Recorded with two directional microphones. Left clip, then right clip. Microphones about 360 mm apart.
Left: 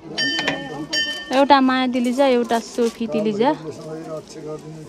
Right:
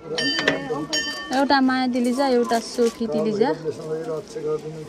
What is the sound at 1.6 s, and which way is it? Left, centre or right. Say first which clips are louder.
Speech: left 2 dB; left.